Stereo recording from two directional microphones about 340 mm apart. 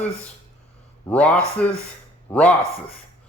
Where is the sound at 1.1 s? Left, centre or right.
Centre.